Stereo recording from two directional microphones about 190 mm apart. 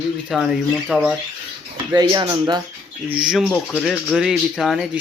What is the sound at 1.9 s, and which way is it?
Speech, 15° right (ahead or behind).